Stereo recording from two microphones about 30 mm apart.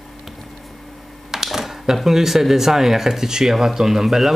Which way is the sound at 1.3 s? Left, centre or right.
Centre.